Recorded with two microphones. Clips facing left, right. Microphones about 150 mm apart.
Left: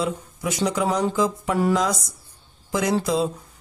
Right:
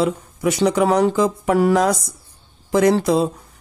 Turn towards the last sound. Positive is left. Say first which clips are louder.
# right 6 dB
turn(degrees=-60)  # may be behind; listen again after turning